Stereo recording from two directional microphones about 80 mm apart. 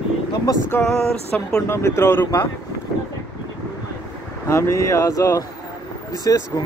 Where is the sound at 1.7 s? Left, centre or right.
Left.